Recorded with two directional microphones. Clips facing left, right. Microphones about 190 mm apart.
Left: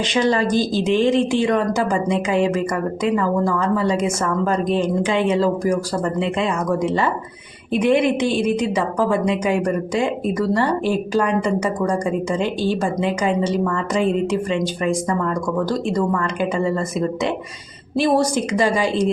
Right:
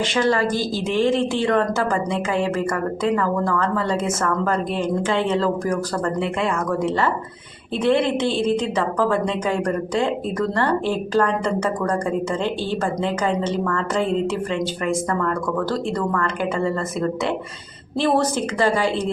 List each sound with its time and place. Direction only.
0.0 s speech: 20° left (ahead or behind)